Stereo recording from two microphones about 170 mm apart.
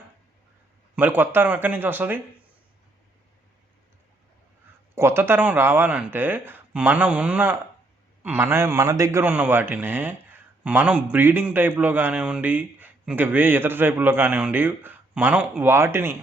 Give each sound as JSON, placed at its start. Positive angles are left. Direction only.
{"t": 0.9, "sound": "a man's voice", "side_deg": -10}
{"t": 4.9, "sound": "a man's voice", "side_deg": -15}